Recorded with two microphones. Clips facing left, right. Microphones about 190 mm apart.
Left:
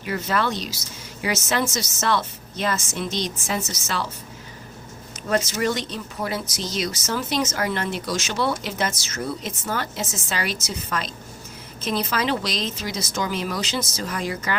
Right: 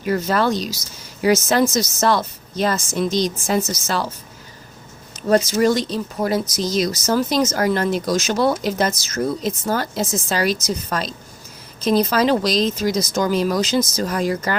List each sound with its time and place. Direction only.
0.0 s speech: 40° right (ahead or behind)
5.5 s speech: 35° right (ahead or behind)